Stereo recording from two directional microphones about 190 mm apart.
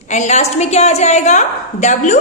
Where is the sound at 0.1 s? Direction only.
35° left (ahead or behind).